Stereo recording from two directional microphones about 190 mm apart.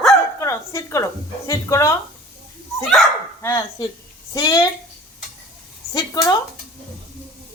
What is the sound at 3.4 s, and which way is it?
A woman's voice, 15° left (ahead or behind).